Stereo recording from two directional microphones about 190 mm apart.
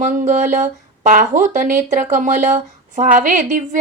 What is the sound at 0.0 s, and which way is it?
A woman's voice, 40° right (ahead or behind).